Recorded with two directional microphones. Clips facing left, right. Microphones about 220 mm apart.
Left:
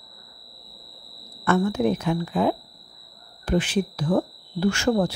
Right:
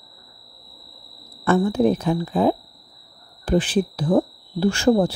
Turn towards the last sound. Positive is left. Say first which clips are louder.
# right 4 dB
turn(degrees=-30)  # may be behind; listen again after turning